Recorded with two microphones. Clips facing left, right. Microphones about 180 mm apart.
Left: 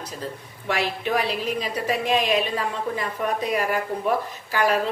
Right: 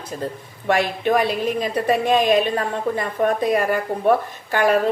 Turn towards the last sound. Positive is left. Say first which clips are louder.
# right 4 dB
turn(degrees=-55)  # may be behind; listen again after turning